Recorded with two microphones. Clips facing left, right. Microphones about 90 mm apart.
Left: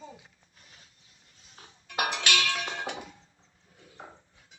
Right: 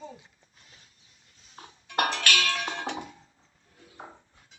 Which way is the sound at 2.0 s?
15° left (ahead or behind).